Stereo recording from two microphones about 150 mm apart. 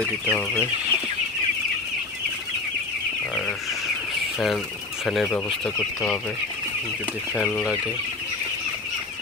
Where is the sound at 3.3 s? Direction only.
5° left (ahead or behind).